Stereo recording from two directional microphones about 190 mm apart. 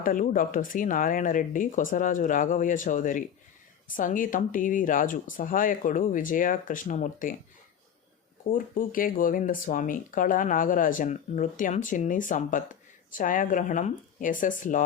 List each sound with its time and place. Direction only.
0.0 s speech: 45° left (ahead or behind)
8.4 s speech: 45° left (ahead or behind)